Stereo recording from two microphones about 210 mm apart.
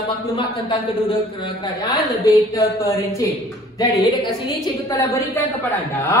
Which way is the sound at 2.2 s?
15° left (ahead or behind).